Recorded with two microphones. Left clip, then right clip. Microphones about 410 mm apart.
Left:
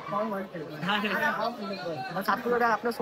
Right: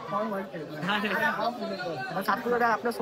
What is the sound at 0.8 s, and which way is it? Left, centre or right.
A man's voice, centre.